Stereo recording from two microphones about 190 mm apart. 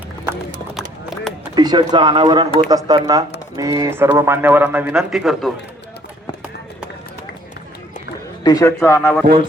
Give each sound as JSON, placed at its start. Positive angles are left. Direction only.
{"t": 0.7, "sound": "run", "side_deg": 0}
{"t": 1.5, "sound": "a man's voice", "side_deg": -20}
{"t": 8.4, "sound": "a man's voice", "side_deg": 15}